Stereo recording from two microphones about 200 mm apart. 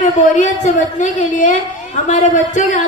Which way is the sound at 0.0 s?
35° left (ahead or behind).